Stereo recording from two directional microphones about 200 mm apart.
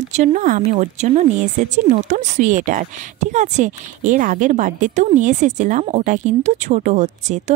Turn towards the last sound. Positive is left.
turn(degrees=-35)  # may be behind; listen again after turning